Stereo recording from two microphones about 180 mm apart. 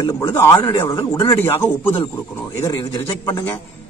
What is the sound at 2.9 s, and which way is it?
Speech, 25° left (ahead or behind).